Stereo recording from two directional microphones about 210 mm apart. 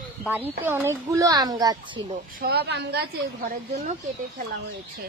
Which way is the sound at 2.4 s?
50° right (ahead or behind).